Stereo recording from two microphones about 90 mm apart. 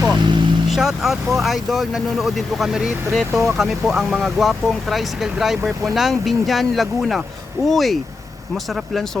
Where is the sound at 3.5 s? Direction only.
Centre (ahead or behind).